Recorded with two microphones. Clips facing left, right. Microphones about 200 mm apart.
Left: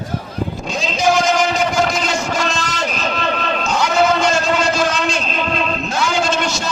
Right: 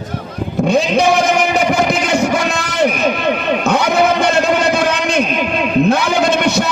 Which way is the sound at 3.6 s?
60° right (ahead or behind).